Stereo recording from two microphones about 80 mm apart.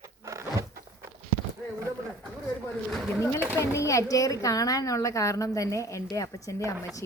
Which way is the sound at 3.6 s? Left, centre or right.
Left.